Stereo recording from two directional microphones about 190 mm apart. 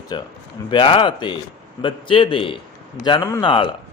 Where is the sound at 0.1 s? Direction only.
25° left (ahead or behind).